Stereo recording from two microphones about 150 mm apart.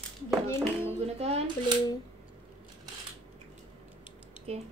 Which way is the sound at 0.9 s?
45° right (ahead or behind).